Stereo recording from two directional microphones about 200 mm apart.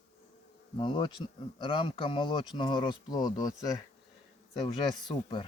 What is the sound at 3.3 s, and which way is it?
Speech, 40° left (ahead or behind).